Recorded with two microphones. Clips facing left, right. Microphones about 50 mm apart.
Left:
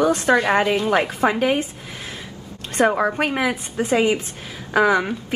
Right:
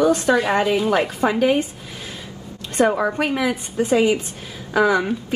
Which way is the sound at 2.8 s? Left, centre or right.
Left.